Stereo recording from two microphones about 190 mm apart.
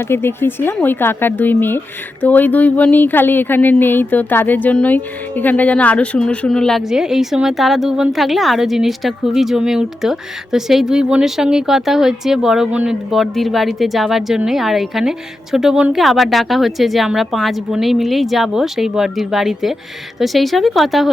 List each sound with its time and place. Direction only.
0.0 s speech: 10° left (ahead or behind)